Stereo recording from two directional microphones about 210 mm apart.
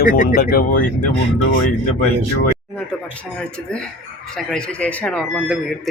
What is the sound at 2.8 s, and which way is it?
Speech, 5° left (ahead or behind).